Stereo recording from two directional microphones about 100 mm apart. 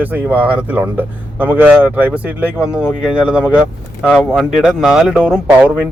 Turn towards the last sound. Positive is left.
turn(degrees=-10)  # may be behind; listen again after turning